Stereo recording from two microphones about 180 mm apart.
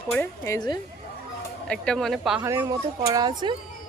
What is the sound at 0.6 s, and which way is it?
Speech, 20° left (ahead or behind).